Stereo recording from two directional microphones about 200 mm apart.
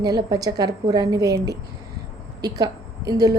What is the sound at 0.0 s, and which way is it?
A woman's voice, 20° right (ahead or behind).